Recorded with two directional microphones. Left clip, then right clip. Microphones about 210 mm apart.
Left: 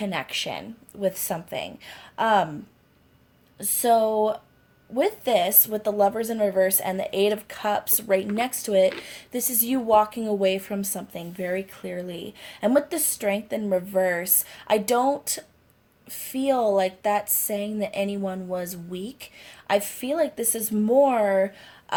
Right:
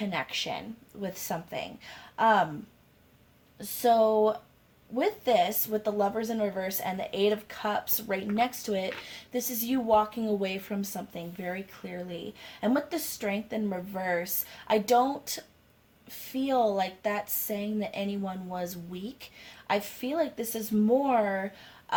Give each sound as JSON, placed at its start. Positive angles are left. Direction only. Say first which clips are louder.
{"t": 0.0, "sound": "a woman's voice", "louder": "left 4 dB", "side_deg": 45}
{"t": 3.6, "sound": "a woman's voice", "louder": "left 3 dB", "side_deg": 45}